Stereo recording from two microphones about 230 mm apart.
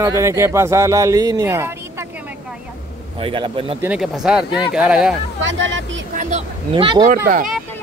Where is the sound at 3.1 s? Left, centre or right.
Right.